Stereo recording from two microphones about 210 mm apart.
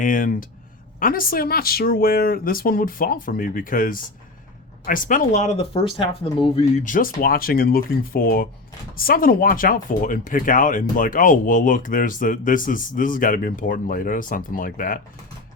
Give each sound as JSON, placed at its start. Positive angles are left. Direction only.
{"t": 0.0, "sound": "speech", "side_deg": 40}